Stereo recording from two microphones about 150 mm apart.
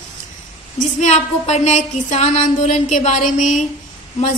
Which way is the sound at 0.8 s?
55° left (ahead or behind).